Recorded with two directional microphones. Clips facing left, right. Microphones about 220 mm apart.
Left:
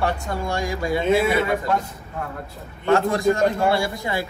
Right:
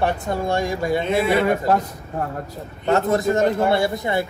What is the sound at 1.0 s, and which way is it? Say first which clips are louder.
Speech: left 6 dB; centre (ahead or behind).